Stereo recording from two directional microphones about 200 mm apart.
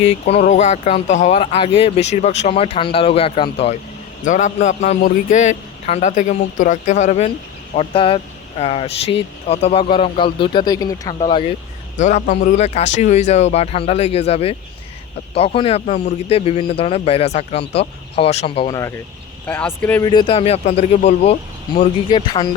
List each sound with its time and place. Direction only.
0.0 s a man's voice: 30° left (ahead or behind)
4.2 s a man's voice: 40° left (ahead or behind)
11.9 s a man's voice: 40° left (ahead or behind); by 20.1 s 10° left (ahead or behind)
20.1 s a man's voice: 25° left (ahead or behind)
22.1 s speech: 20° left (ahead or behind)